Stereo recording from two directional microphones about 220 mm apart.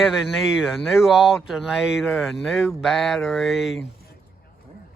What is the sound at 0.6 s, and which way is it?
Speech, centre (ahead or behind).